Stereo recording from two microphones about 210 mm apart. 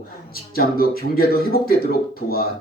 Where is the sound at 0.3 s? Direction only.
45° left (ahead or behind).